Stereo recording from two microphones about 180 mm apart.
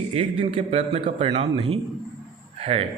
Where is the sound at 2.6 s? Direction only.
35° right (ahead or behind).